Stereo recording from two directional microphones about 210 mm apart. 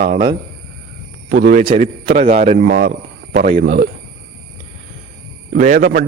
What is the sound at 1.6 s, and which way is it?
Speech, 25° right (ahead or behind).